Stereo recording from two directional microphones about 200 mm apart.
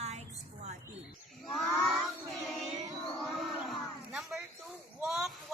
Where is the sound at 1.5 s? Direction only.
Centre (ahead or behind).